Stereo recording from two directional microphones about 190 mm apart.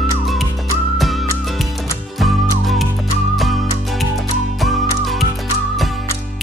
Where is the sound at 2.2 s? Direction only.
Centre (ahead or behind).